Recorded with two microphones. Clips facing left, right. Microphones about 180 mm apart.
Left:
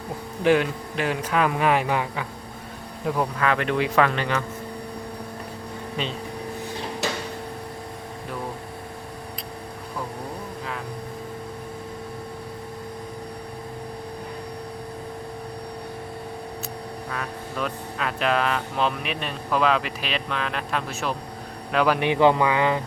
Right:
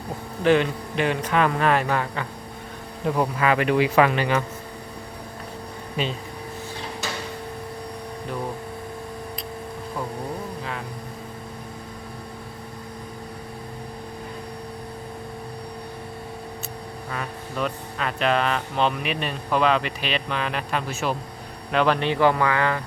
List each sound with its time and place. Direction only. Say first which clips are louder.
0.4 s speech: right 1 dB; 5° left (ahead or behind)
3.1 s speech: right 2 dB; 5° right (ahead or behind)
17.1 s speech: right 1 dB; centre (ahead or behind); by 22.8 s 15° left (ahead or behind)